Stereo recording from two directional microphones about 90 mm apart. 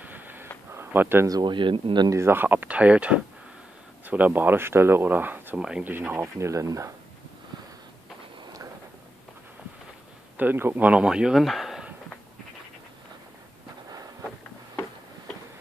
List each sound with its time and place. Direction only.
0.0 s a sound: 20° right (ahead or behind)
1.4 s speech: 60° right (ahead or behind)
2.0 s speech: 30° right (ahead or behind)
5.6 s speech: 10° right (ahead or behind)
6.2 s speech: 35° right (ahead or behind)
10.3 s speech: 20° right (ahead or behind); by 11.9 s 5° right (ahead or behind)